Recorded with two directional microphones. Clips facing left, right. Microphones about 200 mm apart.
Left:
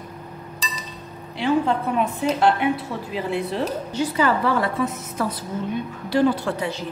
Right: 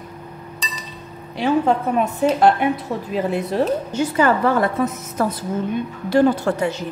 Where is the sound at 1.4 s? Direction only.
45° right (ahead or behind).